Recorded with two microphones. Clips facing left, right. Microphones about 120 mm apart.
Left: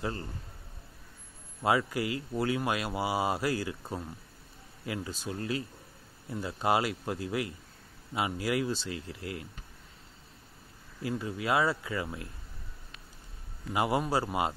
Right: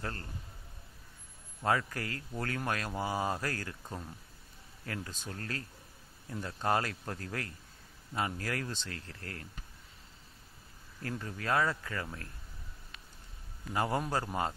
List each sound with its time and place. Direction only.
0.0 s speech: 15° left (ahead or behind)
1.6 s speech: 10° left (ahead or behind)
4.8 s speech: 10° left (ahead or behind)
11.0 s speech: 10° left (ahead or behind)
13.7 s speech: 10° left (ahead or behind)